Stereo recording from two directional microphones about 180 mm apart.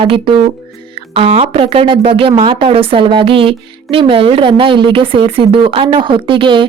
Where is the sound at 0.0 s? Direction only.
30° right (ahead or behind).